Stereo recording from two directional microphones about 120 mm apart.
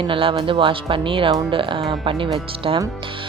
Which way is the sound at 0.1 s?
50° right (ahead or behind).